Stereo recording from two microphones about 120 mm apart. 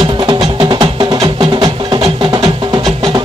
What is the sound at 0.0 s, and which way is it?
Music, 35° right (ahead or behind).